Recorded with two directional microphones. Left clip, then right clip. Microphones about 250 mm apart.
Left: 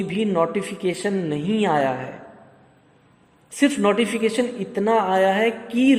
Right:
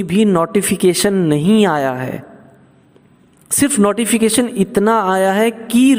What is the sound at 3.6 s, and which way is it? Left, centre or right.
A man's voice, right.